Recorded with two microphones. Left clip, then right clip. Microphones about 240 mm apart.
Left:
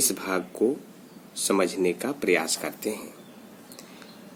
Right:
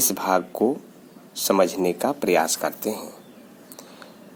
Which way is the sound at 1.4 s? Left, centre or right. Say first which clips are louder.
Right 4 dB; right.